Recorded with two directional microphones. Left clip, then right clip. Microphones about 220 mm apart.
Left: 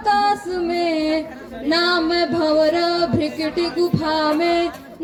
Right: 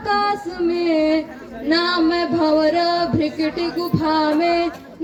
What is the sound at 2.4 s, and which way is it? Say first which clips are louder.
Music: right 1 dB; 55° left (ahead or behind).